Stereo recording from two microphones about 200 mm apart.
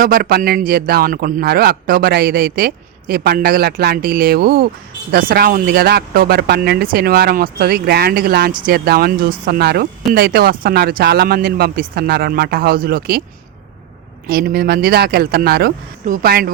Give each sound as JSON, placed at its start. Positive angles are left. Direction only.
{"t": 0.0, "sound": "speech", "side_deg": -50}
{"t": 14.3, "sound": "speech", "side_deg": -50}